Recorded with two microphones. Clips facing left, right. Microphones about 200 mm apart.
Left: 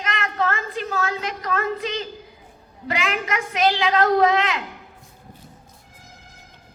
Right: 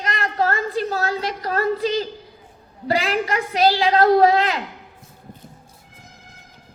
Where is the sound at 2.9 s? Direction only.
35° right (ahead or behind).